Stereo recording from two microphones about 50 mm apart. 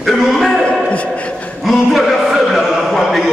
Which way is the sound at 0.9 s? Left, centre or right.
Left.